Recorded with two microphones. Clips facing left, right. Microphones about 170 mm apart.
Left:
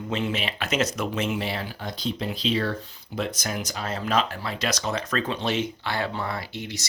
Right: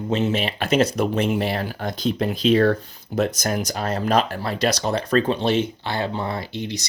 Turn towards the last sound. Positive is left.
turn(degrees=-20)  # may be behind; listen again after turning